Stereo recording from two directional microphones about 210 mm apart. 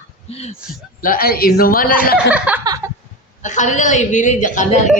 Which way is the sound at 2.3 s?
5° right (ahead or behind).